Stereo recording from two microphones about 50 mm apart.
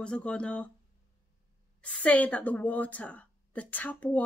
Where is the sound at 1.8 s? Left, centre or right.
Left.